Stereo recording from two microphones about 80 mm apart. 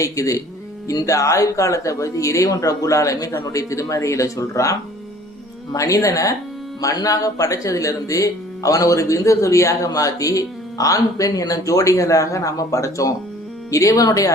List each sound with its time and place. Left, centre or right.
0.0 s speech: left
5.7 s speech: left